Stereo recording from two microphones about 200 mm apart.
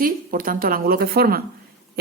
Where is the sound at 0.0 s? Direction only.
45° right (ahead or behind).